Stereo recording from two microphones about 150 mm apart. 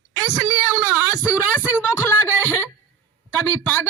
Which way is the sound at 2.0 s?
15° left (ahead or behind).